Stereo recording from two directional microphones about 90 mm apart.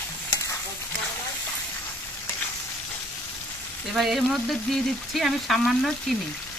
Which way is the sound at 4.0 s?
Centre (ahead or behind).